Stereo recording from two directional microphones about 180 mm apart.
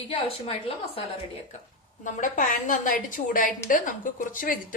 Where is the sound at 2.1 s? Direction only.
45° left (ahead or behind).